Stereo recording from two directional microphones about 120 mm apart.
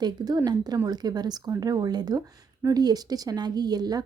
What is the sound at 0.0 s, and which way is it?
A woman's voice, 35° right (ahead or behind).